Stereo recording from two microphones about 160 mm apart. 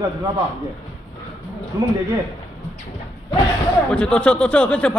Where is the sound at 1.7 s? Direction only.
20° right (ahead or behind).